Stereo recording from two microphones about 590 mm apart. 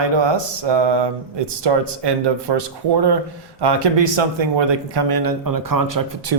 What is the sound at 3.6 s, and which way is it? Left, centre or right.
Speech, right.